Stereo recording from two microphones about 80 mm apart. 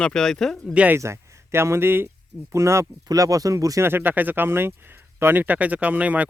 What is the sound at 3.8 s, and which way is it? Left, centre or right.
Speech, right.